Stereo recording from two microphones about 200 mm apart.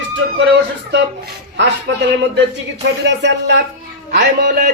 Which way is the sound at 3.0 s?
60° right (ahead or behind).